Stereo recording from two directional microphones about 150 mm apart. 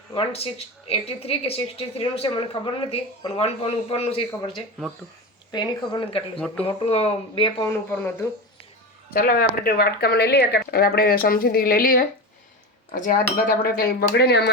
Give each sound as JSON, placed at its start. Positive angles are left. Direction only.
{"t": 0.1, "sound": "a woman's voice", "side_deg": 40}
{"t": 5.5, "sound": "a woman's voice", "side_deg": 30}
{"t": 7.9, "sound": "speech", "side_deg": 15}
{"t": 9.0, "sound": "speech", "side_deg": 75}
{"t": 13.5, "sound": "speech", "side_deg": 90}